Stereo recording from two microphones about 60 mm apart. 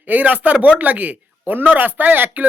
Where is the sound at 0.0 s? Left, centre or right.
Right.